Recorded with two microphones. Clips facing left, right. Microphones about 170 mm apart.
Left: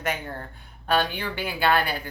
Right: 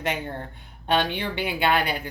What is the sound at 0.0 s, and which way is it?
A woman's voice, 25° right (ahead or behind).